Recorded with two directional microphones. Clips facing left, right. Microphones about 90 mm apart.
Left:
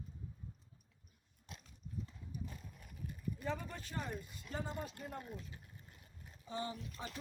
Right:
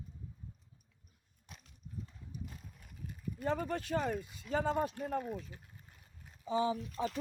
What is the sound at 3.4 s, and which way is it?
Speech, 60° right (ahead or behind).